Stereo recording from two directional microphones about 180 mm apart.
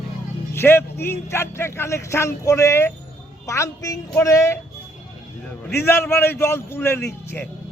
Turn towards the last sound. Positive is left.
turn(degrees=15)  # may be behind; listen again after turning